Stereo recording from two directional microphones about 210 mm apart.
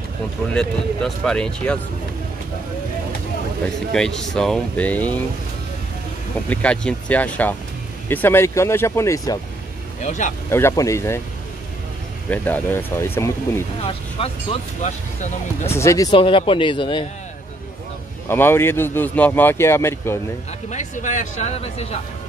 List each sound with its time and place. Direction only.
0.5 s speech: 5° left (ahead or behind)
3.9 s speech: centre (ahead or behind)
6.5 s speech: 5° left (ahead or behind)
10.0 s speech: 35° left (ahead or behind)
10.5 s speech: 15° left (ahead or behind)
12.3 s speech: 10° left (ahead or behind)
13.8 s speech: 30° left (ahead or behind)
15.7 s speech: 15° left (ahead or behind)
18.3 s speech: 10° left (ahead or behind)
20.7 s speech: 35° left (ahead or behind)